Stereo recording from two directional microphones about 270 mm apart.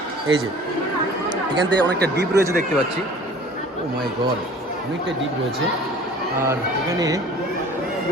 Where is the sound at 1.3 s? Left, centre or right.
Centre.